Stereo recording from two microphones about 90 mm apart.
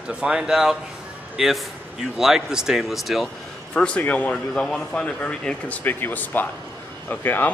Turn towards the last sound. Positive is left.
turn(degrees=20)  # may be behind; listen again after turning